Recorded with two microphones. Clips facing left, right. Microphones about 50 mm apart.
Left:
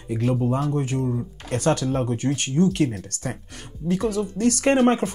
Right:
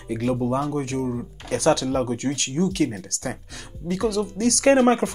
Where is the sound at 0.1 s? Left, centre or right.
Right.